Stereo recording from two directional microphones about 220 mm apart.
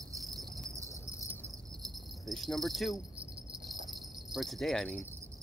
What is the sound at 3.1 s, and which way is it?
Jingle bell, 25° right (ahead or behind).